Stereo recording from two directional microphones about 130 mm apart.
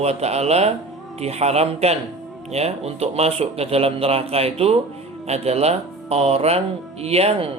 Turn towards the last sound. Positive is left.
turn(degrees=-50)  # may be behind; listen again after turning